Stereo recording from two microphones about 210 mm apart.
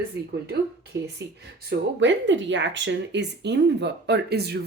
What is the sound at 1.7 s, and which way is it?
Speech, 60° right (ahead or behind).